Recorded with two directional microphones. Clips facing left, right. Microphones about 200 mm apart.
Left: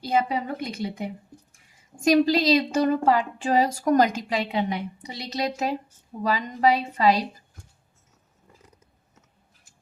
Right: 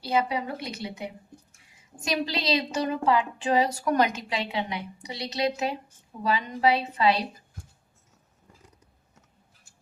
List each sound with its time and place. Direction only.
0.0 s a woman's voice: 45° left (ahead or behind)